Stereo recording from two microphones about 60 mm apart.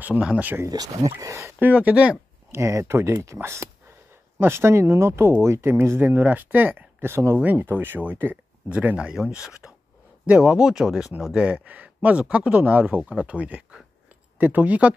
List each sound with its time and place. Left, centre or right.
0.7 s speech: right
1.6 s speech: right
2.5 s speech: right
7.1 s speech: right
7.4 s speech: right
8.6 s speech: right
10.2 s speech: centre
11.4 s speech: right